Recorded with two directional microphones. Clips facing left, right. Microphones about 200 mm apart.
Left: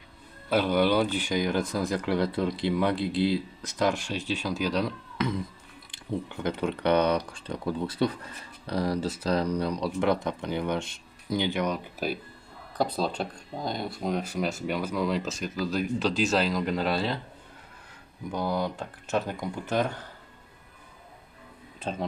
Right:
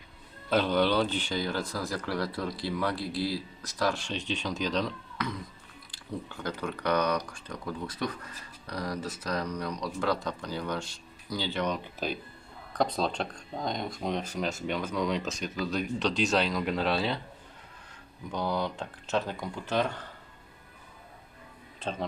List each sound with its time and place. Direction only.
0.5 s speech: 10° left (ahead or behind)
4.0 s speech: 10° left (ahead or behind)
5.1 s music: 25° left (ahead or behind)
5.9 s speech: 20° left (ahead or behind); by 17.2 s centre (ahead or behind)
18.3 s speech: 10° left (ahead or behind)
21.9 s speech: 5° left (ahead or behind)